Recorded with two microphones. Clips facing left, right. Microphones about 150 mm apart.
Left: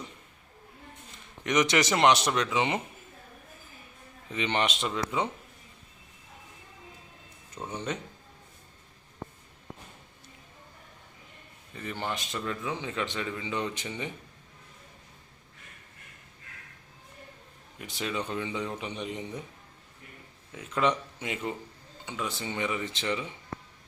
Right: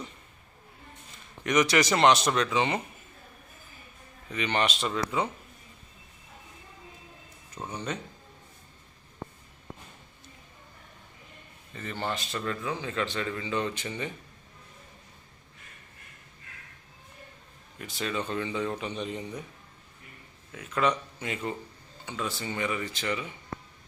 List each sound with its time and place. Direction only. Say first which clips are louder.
1.5 s speech: right 1 dB; 20° left (ahead or behind)
4.3 s speech: right 1 dB; 25° left (ahead or behind)
7.6 s speech: even; 10° right (ahead or behind)
11.7 s speech: right 1 dB; 10° left (ahead or behind)
17.7 s speech: right 1 dB; 15° left (ahead or behind)
20.5 s speech: even; 20° left (ahead or behind)